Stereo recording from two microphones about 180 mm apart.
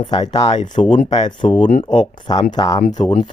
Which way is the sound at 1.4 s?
25° left (ahead or behind).